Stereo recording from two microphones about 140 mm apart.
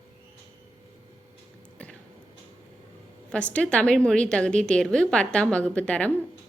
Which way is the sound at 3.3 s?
10° left (ahead or behind).